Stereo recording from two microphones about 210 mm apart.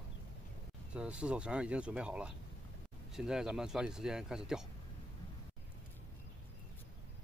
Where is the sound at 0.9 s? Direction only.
5° right (ahead or behind).